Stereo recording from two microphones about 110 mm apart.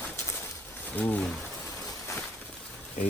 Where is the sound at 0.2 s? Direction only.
20° left (ahead or behind).